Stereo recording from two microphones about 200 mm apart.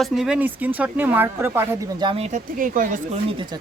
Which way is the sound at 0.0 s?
5° right (ahead or behind).